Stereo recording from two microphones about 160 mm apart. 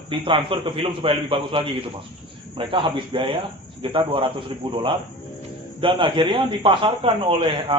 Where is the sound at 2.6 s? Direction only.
30° right (ahead or behind).